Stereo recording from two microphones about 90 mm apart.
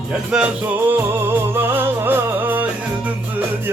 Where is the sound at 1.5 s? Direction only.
25° right (ahead or behind).